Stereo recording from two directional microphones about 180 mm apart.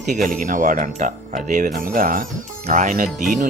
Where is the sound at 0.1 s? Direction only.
45° right (ahead or behind).